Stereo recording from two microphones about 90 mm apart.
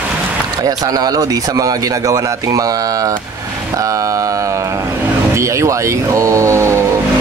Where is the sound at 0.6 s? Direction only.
45° right (ahead or behind).